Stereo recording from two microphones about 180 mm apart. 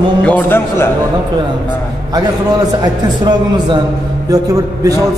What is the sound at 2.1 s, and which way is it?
A man's voice, 20° right (ahead or behind).